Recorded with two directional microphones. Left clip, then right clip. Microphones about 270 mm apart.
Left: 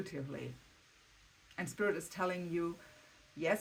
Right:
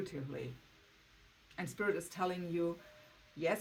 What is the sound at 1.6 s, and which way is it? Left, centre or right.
Speech, left.